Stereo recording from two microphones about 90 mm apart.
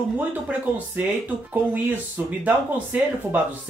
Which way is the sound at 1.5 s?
20° right (ahead or behind).